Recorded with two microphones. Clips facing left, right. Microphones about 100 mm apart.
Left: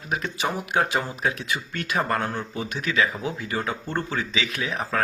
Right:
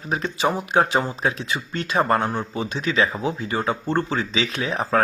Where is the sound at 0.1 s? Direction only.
30° right (ahead or behind).